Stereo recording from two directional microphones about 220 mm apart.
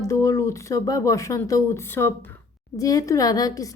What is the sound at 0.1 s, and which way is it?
Speech, 15° left (ahead or behind).